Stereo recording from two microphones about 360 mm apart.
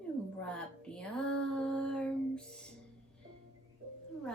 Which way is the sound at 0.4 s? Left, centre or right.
Centre.